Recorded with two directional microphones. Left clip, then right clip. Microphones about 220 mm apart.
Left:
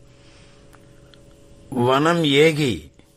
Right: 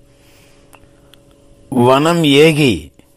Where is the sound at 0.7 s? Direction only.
15° right (ahead or behind).